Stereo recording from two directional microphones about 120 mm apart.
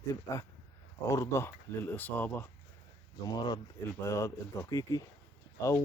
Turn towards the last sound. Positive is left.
turn(degrees=25)  # may be behind; listen again after turning